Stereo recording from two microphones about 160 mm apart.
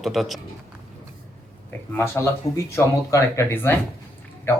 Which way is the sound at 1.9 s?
15° left (ahead or behind).